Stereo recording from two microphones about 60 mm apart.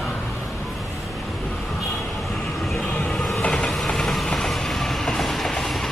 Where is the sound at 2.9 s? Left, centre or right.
Centre.